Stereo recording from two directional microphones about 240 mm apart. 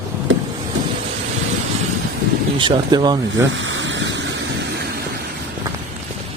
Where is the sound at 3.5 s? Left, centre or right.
Right.